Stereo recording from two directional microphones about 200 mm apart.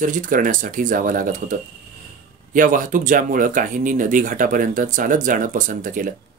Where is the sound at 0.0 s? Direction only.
40° right (ahead or behind).